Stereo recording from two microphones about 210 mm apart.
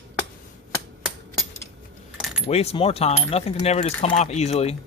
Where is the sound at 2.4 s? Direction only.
30° left (ahead or behind).